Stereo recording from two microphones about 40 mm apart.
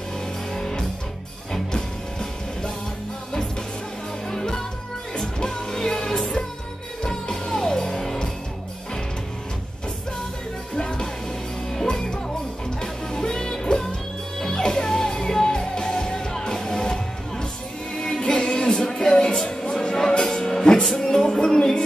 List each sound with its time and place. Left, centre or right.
0.5 s music: centre
4.3 s music: centre
10.8 s music: left